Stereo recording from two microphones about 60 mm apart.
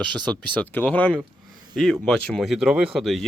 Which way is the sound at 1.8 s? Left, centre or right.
Centre.